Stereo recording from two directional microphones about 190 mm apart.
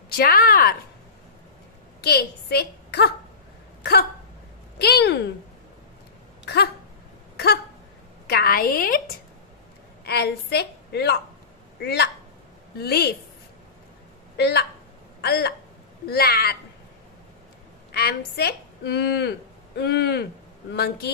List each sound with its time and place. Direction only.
0.1 s speech: 50° left (ahead or behind)
2.0 s a woman's voice: 55° left (ahead or behind)
4.7 s a woman's voice: 60° left (ahead or behind)
6.4 s a sound: 55° left (ahead or behind)
8.3 s a woman's voice: 55° left (ahead or behind)
10.0 s a woman's voice: 60° left (ahead or behind)
14.3 s a woman's voice: 60° left (ahead or behind)
17.9 s a woman's voice: 55° left (ahead or behind)